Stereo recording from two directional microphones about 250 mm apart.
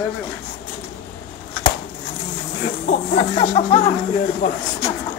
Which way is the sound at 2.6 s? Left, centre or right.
Left.